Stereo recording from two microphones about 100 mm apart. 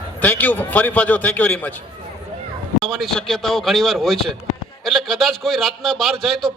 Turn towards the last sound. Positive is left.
turn(degrees=0)  # may be behind; listen again after turning